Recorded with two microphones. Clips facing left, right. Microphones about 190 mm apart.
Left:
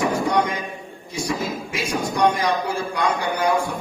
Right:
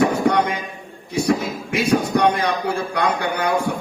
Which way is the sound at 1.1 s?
60° right (ahead or behind).